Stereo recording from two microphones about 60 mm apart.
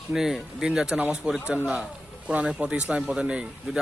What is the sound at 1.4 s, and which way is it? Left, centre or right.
A man's voice, right.